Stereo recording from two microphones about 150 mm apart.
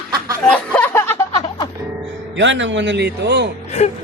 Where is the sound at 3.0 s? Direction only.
90° right.